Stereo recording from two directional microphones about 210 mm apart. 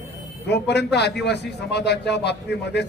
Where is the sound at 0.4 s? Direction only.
55° left (ahead or behind).